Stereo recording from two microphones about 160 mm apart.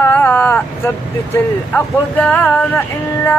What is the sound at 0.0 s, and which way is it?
Speech, 15° left (ahead or behind).